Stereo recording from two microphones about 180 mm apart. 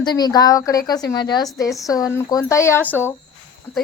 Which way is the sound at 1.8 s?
20° left (ahead or behind).